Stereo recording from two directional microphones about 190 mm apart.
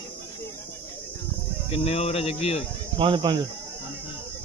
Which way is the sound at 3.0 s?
25° right (ahead or behind).